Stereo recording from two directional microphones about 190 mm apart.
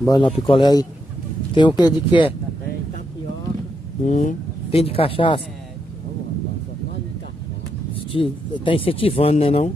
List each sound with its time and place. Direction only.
0.0 s speech: 20° left (ahead or behind)
4.0 s speech: 40° left (ahead or behind)
8.1 s speech: 30° left (ahead or behind)